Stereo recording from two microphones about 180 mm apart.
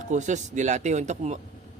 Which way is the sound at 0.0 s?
40° right (ahead or behind).